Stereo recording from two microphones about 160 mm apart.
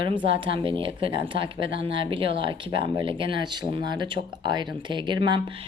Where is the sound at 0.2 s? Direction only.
30° right (ahead or behind).